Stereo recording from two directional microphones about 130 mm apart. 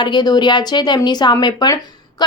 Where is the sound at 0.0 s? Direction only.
35° left (ahead or behind).